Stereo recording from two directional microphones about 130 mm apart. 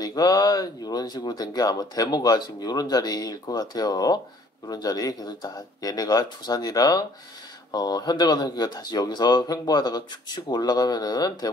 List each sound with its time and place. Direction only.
0.0 s speech: 30° left (ahead or behind)